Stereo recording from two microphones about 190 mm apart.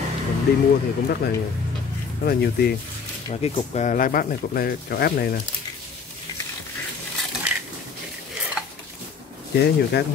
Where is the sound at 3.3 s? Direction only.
35° left (ahead or behind); by 5.4 s 55° left (ahead or behind).